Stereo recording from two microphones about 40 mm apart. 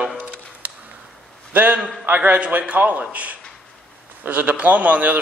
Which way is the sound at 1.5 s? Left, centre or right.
Right.